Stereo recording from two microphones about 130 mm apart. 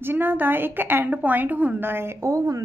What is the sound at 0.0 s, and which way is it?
A woman's voice, 15° right (ahead or behind).